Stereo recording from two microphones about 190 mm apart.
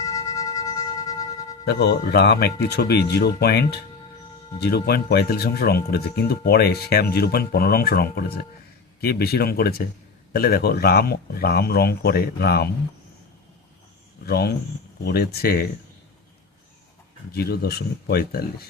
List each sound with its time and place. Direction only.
0.0 s a sound: 15° left (ahead or behind)
1.6 s speech: 60° left (ahead or behind)
14.3 s speech: 60° left (ahead or behind)
17.3 s speech: 55° left (ahead or behind)